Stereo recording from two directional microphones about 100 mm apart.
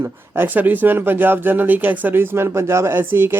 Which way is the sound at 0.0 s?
20° right (ahead or behind).